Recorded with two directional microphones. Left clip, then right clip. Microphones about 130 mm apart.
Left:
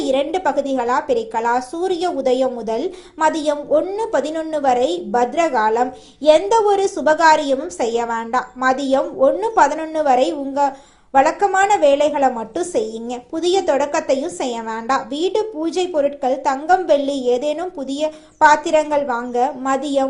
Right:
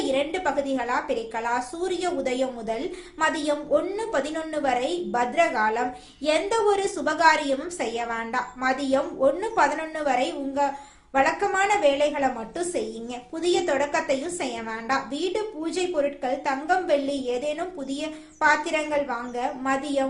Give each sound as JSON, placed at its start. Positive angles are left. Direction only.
{"t": 0.1, "sound": "a woman's voice", "side_deg": 40}